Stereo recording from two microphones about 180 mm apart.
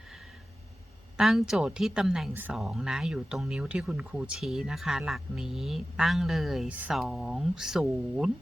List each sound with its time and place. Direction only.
1.1 s speech: centre (ahead or behind)